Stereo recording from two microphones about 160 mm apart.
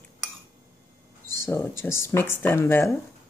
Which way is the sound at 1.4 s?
15° left (ahead or behind).